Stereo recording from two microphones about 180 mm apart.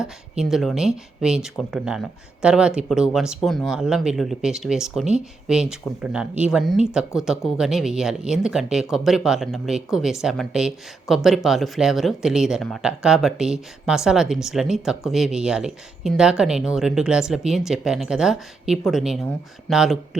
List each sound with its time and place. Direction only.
0.0 s speech: centre (ahead or behind)